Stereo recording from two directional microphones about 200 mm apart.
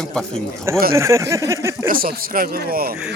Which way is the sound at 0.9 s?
15° right (ahead or behind).